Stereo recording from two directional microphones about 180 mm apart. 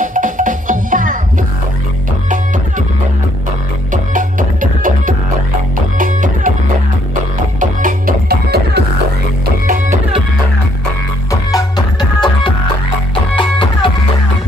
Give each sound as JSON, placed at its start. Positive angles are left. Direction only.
{"t": 0.0, "sound": "music", "side_deg": -45}
{"t": 3.9, "sound": "music", "side_deg": -45}
{"t": 7.8, "sound": "music", "side_deg": -60}
{"t": 11.5, "sound": "music", "side_deg": 25}